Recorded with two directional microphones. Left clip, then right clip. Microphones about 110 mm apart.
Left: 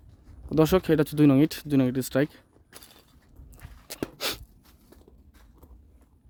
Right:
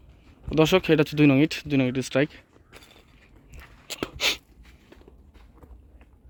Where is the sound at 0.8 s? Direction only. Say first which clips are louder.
Right 2 dB; 40° left (ahead or behind).